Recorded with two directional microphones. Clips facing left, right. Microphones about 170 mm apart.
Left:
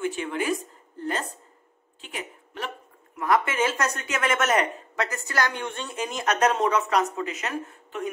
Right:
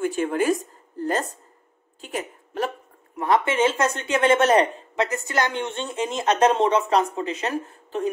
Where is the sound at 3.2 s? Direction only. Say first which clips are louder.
Right 3 dB; 25° right (ahead or behind).